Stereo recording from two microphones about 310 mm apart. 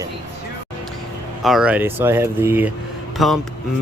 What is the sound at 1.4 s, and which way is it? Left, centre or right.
Speech, centre.